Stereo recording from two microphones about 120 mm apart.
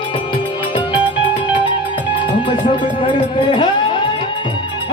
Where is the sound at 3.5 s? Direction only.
40° left (ahead or behind).